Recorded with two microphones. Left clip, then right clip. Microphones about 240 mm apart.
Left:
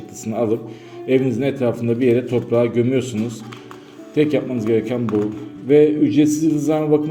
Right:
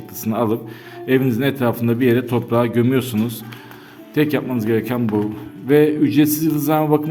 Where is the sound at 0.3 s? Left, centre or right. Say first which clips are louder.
Even; right.